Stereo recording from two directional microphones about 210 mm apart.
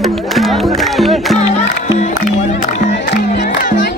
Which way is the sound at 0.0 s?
Centre (ahead or behind).